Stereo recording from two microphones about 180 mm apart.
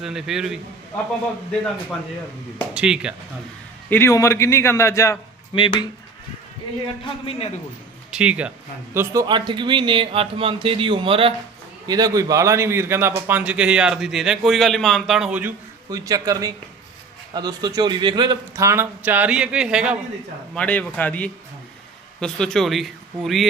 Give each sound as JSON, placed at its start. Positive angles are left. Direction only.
{"t": 0.0, "sound": "speech", "side_deg": 0}
{"t": 2.6, "sound": "speech", "side_deg": -5}
{"t": 3.8, "sound": "a man's voice", "side_deg": 10}
{"t": 5.5, "sound": "speech", "side_deg": 25}
{"t": 7.3, "sound": "a man's voice", "side_deg": 35}
{"t": 8.1, "sound": "a man's voice", "side_deg": -5}
{"t": 9.2, "sound": "a man's voice", "side_deg": -25}
{"t": 15.9, "sound": "a man's voice", "side_deg": -20}
{"t": 20.6, "sound": "a man's voice", "side_deg": 5}